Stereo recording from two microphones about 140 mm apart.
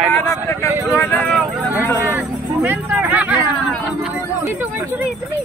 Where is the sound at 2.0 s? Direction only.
15° right (ahead or behind).